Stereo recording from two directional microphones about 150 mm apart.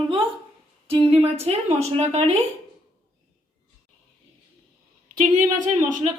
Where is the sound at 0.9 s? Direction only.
35° right (ahead or behind).